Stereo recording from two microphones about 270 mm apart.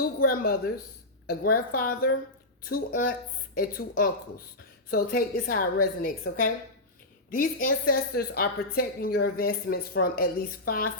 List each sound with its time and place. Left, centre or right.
0.0 s a woman's voice: left